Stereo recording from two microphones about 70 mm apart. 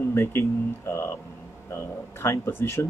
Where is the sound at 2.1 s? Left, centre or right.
Left.